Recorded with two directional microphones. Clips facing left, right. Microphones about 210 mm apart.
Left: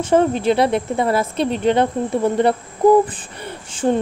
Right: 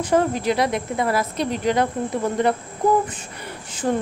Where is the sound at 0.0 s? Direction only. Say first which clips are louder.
Left 4 dB; 25° left (ahead or behind).